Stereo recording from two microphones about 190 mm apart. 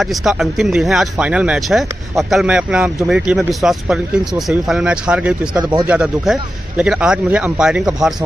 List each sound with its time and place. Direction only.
0.0 s speech: centre (ahead or behind)
5.6 s speech: 25° right (ahead or behind)
5.9 s speech: 5° right (ahead or behind)